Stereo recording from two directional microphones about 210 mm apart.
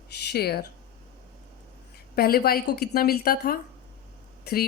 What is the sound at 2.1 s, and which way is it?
Speech, 45° left (ahead or behind).